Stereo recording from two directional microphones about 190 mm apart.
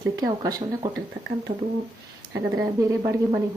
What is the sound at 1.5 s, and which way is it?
Speech, 30° right (ahead or behind).